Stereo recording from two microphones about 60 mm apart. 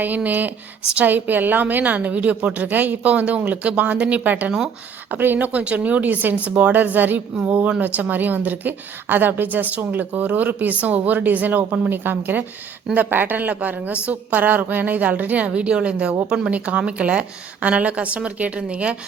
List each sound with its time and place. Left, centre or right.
0.0 s a woman's voice: right